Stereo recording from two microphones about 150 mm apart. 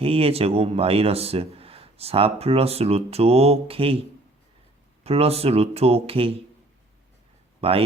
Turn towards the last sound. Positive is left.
turn(degrees=-40)  # may be behind; listen again after turning